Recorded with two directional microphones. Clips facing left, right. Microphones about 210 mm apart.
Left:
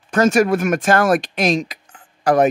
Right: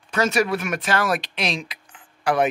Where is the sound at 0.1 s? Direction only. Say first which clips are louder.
Left 6 dB; 50° left (ahead or behind).